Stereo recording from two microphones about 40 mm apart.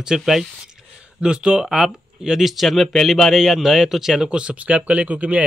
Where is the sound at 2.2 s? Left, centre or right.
Centre.